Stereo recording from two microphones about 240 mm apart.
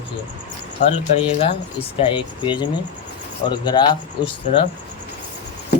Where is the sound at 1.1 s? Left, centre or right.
Left.